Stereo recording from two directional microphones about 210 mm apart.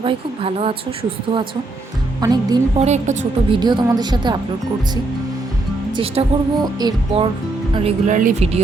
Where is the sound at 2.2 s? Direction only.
20° right (ahead or behind).